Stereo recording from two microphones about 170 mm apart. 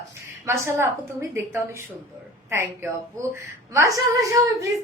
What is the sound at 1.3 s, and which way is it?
A woman's voice, 15° right (ahead or behind).